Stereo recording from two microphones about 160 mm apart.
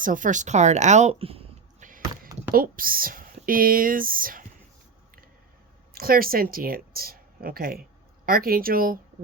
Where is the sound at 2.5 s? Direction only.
60° right (ahead or behind).